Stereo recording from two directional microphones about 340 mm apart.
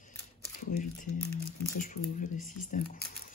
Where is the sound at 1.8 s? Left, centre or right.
Left.